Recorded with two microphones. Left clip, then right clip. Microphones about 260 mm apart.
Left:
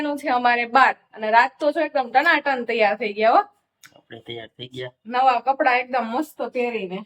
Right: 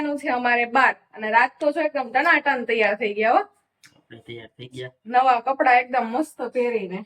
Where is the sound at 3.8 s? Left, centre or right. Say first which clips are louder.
Left 5 dB; centre.